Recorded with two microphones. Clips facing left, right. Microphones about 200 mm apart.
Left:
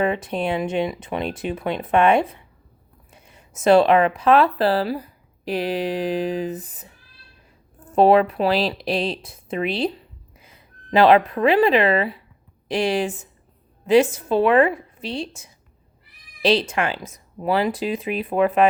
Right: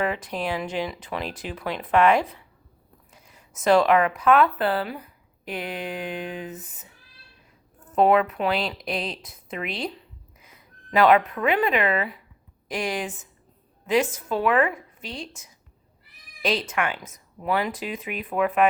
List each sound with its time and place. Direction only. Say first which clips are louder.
0.0 s a woman's voice: left 5 dB; 25° left (ahead or behind)